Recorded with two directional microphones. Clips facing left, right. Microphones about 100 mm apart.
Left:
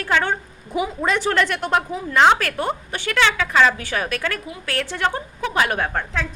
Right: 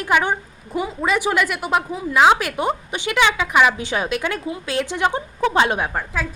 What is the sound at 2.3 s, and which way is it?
A woman's voice, 15° right (ahead or behind).